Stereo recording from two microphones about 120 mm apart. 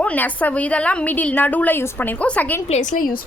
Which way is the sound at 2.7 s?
90° left.